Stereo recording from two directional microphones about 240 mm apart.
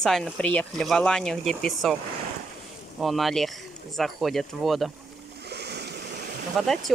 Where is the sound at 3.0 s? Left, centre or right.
Centre.